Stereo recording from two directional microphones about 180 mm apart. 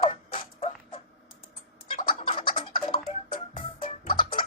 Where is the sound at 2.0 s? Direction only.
30° left (ahead or behind).